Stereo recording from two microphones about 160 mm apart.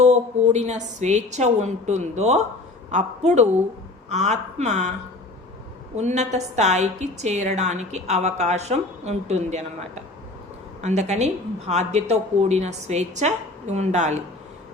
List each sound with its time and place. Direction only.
0.0 s a woman's voice: 45° right (ahead or behind)
6.0 s a woman's voice: 45° right (ahead or behind)